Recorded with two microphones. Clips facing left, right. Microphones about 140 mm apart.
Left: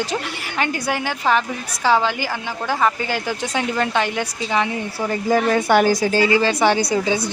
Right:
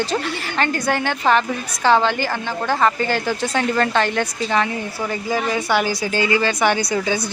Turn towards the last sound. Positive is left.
turn(degrees=25)  # may be behind; listen again after turning